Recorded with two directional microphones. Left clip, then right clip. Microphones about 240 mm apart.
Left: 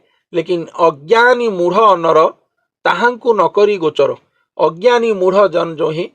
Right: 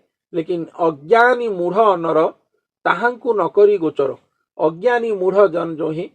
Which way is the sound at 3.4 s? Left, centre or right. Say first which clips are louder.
Right 1 dB; left.